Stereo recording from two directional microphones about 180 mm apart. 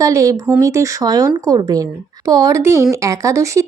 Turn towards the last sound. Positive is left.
turn(degrees=-15)  # may be behind; listen again after turning